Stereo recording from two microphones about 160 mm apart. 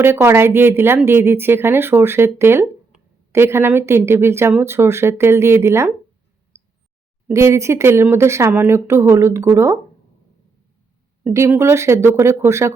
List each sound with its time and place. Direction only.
0.0 s speech: 15° right (ahead or behind)
7.3 s speech: 20° right (ahead or behind)
11.2 s speech: 15° right (ahead or behind)